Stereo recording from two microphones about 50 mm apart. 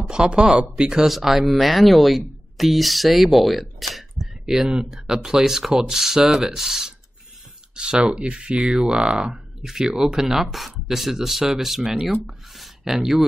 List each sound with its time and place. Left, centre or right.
0.1 s speech: centre
1.0 s speech: centre
7.7 s speech: centre
12.5 s a sound: centre